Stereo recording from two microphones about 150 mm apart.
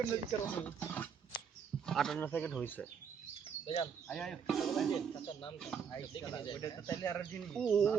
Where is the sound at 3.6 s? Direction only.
40° left (ahead or behind).